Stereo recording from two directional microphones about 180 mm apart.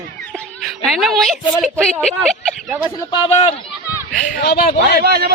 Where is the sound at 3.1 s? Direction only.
30° left (ahead or behind).